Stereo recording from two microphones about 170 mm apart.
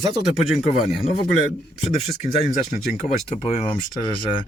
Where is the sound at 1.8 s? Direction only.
40° left (ahead or behind).